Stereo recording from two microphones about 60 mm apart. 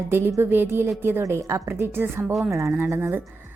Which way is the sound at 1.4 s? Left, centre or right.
Right.